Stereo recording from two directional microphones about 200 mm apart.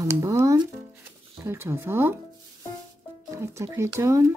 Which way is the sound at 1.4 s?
10° right (ahead or behind).